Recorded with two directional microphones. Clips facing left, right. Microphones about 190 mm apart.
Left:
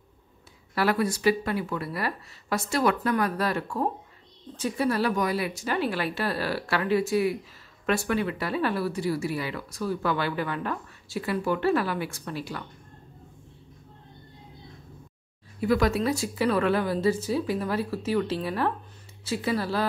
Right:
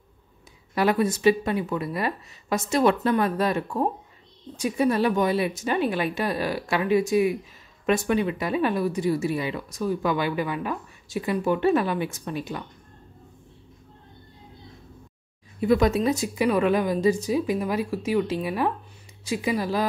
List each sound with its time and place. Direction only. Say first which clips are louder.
0.7 s a woman's voice: right 3 dB; 20° right (ahead or behind)
15.6 s a woman's voice: right 3 dB; 20° right (ahead or behind)